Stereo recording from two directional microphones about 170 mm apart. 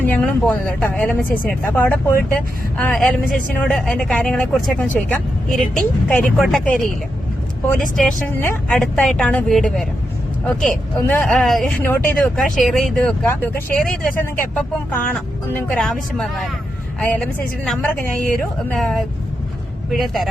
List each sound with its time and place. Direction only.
0.0 s speech: 10° left (ahead or behind)
7.8 s speech: centre (ahead or behind)